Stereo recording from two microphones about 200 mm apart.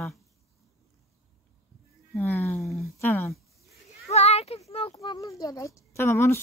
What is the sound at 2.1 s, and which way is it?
Speech, 10° left (ahead or behind).